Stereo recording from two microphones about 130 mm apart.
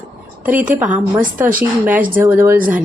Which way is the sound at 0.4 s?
15° right (ahead or behind).